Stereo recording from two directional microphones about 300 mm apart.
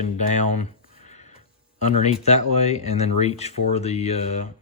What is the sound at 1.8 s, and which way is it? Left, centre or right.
Speech, left.